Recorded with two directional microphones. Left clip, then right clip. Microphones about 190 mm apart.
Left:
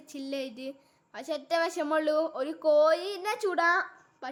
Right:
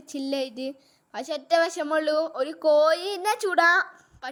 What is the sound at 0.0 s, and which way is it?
A woman's voice, 30° right (ahead or behind).